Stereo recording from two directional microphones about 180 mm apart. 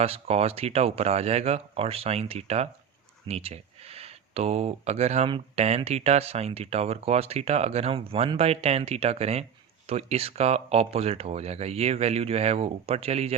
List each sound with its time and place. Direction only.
0.0 s speech: 35° right (ahead or behind)